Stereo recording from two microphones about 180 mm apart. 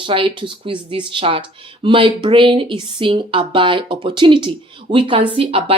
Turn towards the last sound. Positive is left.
turn(degrees=-30)  # may be behind; listen again after turning